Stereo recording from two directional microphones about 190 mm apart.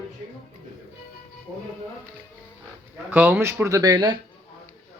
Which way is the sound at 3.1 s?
10° right (ahead or behind).